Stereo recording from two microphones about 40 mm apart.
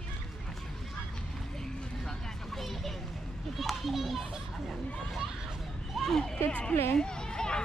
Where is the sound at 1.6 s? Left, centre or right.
Centre.